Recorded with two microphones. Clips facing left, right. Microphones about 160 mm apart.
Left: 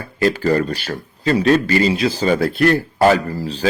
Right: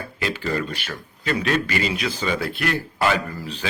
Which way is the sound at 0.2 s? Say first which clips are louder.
Left 9 dB; 40° left (ahead or behind).